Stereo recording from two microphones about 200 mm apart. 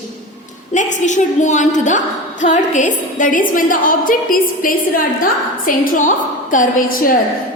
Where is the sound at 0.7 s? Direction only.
35° left (ahead or behind).